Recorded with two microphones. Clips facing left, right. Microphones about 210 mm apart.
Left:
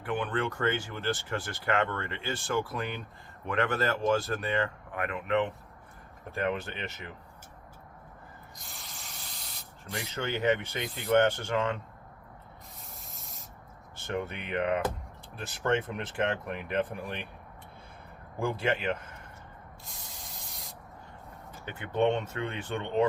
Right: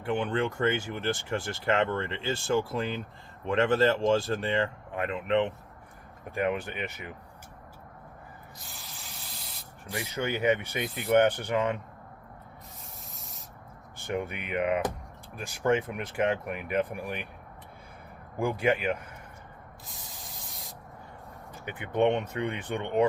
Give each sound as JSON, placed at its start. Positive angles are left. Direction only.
{"t": 0.0, "sound": "speech", "side_deg": -25}
{"t": 6.3, "sound": "speech", "side_deg": -15}
{"t": 8.6, "sound": "rub", "side_deg": 0}
{"t": 10.1, "sound": "speech", "side_deg": -15}
{"t": 13.1, "sound": "sanding", "side_deg": 0}
{"t": 14.1, "sound": "speech", "side_deg": -10}
{"t": 18.3, "sound": "speech", "side_deg": -15}
{"t": 19.9, "sound": "spray", "side_deg": 0}
{"t": 21.6, "sound": "speech", "side_deg": -15}